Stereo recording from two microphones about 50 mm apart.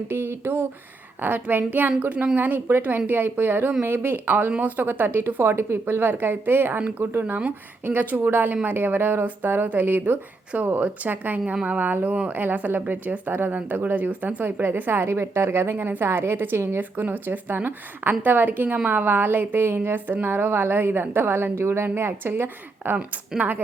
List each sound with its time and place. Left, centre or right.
0.1 s speech: right
14.6 s speech: right
21.9 s speech: right